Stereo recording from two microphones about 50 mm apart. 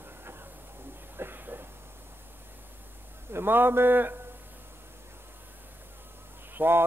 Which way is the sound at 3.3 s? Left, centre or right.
Right.